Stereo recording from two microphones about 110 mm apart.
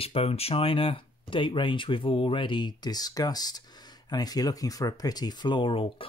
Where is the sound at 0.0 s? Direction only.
60° left (ahead or behind).